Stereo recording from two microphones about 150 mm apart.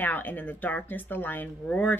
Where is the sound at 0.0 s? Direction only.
10° left (ahead or behind).